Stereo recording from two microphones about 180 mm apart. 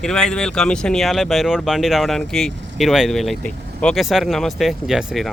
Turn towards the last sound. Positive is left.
turn(degrees=0)  # may be behind; listen again after turning